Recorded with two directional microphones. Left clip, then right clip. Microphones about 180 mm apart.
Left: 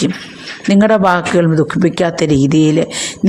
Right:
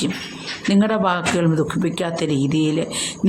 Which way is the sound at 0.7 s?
30° left (ahead or behind).